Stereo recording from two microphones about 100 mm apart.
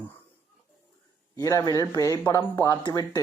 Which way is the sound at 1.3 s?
35° left (ahead or behind).